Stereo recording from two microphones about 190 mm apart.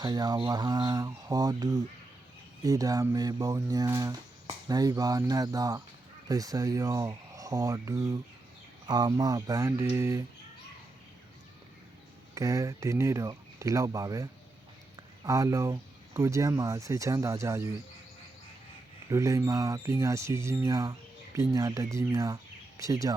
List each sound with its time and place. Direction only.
0.0 s speech: 20° right (ahead or behind)
12.3 s speech: 15° right (ahead or behind)
19.1 s speech: 15° right (ahead or behind)